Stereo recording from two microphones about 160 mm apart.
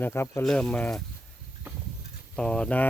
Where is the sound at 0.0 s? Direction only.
15° left (ahead or behind).